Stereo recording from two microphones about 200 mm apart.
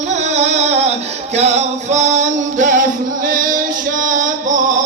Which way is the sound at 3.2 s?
45° right (ahead or behind).